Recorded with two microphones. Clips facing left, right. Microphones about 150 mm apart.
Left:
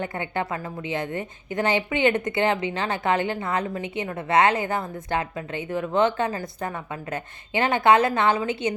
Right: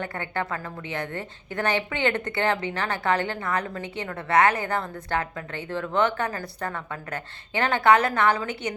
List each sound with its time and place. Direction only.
0.0 s a woman's voice: 15° left (ahead or behind)